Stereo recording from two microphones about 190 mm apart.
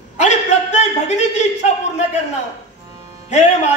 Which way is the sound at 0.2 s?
35° left (ahead or behind).